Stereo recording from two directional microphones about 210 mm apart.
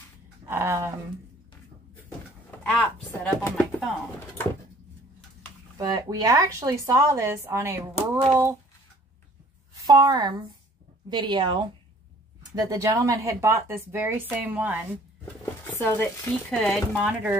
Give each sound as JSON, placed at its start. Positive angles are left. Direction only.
{"t": 0.5, "sound": "speech", "side_deg": -10}
{"t": 2.6, "sound": "speech", "side_deg": 5}
{"t": 5.8, "sound": "speech", "side_deg": -15}
{"t": 9.8, "sound": "a woman's voice", "side_deg": -20}
{"t": 15.6, "sound": "speech", "side_deg": 10}